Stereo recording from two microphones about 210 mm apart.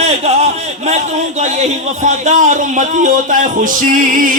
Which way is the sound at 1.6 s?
35° right (ahead or behind).